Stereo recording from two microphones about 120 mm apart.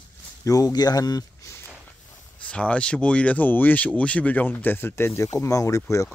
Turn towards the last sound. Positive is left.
turn(degrees=30)  # may be behind; listen again after turning